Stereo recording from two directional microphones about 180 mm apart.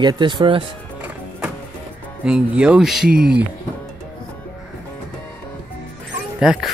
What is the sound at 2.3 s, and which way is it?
Speech, 5° right (ahead or behind).